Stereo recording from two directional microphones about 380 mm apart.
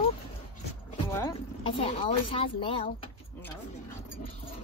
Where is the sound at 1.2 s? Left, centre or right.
Centre.